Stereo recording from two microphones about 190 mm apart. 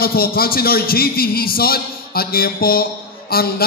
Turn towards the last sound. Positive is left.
turn(degrees=55)  # may be behind; listen again after turning